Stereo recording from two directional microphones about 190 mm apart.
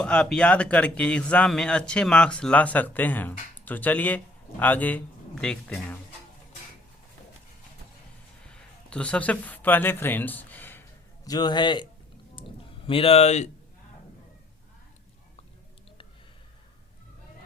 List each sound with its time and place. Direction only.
0.0 s speech: 5° left (ahead or behind)
8.9 s speech: 5° left (ahead or behind)
11.3 s a man's voice: 20° left (ahead or behind)
12.4 s a sound: 25° left (ahead or behind)